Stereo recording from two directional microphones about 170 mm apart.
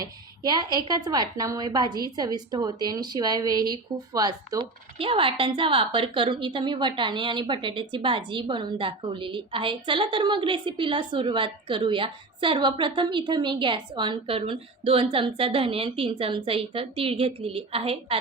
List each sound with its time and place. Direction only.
0.0 s a woman's voice: 20° right (ahead or behind)